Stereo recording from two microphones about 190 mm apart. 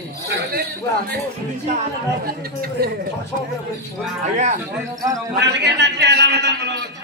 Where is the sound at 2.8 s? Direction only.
55° right (ahead or behind).